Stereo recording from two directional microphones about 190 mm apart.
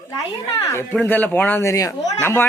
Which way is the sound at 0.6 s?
15° left (ahead or behind).